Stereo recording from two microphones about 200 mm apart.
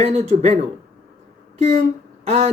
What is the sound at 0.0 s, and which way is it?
Speech, 35° right (ahead or behind).